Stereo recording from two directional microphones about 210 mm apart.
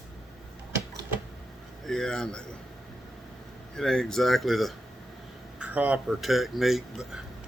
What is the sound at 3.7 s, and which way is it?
Speech, 5° left (ahead or behind).